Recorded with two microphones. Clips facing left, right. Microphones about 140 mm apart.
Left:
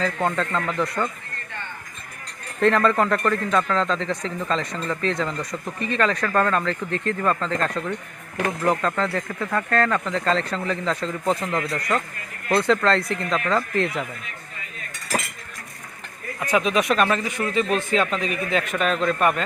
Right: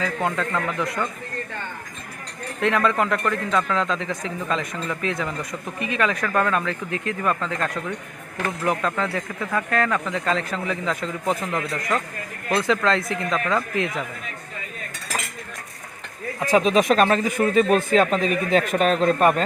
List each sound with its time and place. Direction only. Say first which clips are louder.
0.0 s speech: left 1 dB; 5° right (ahead or behind)
2.6 s speech: left 2 dB; 5° right (ahead or behind)
16.4 s speech: right 3 dB; 30° right (ahead or behind)